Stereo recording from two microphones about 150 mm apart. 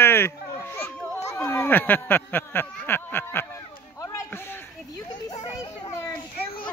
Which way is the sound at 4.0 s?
15° left (ahead or behind).